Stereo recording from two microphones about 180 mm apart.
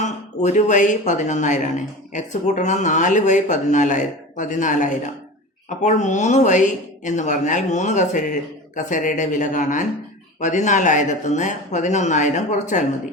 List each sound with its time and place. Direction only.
0.0 s speech: 40° left (ahead or behind)